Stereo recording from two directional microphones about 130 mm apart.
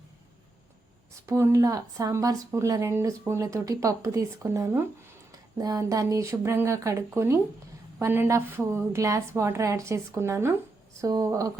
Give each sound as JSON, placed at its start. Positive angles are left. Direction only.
{"t": 1.3, "sound": "speech", "side_deg": -25}